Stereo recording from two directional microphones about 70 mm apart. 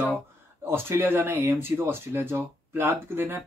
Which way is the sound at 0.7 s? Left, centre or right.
Right.